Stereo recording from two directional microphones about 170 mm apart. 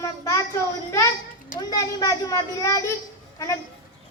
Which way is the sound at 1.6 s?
20° left (ahead or behind).